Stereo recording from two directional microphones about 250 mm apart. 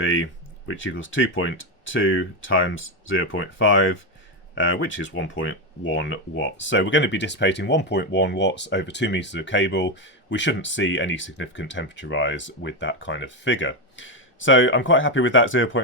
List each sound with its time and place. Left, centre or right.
0.0 s speech: left